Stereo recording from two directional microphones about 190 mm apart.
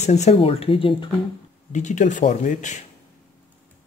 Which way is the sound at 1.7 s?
40° left (ahead or behind).